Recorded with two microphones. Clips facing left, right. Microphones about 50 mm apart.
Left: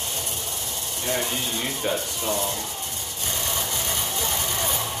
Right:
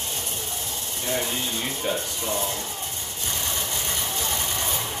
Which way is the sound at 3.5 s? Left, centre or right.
Left.